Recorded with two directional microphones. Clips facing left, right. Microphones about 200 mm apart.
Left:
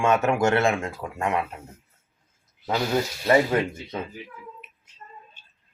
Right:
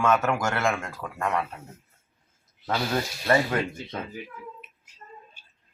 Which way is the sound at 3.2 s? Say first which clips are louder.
Left 3 dB; 20° left (ahead or behind).